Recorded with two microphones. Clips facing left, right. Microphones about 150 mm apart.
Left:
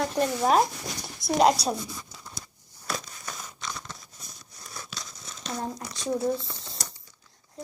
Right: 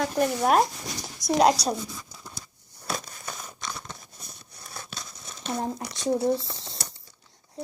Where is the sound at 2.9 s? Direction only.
5° right (ahead or behind).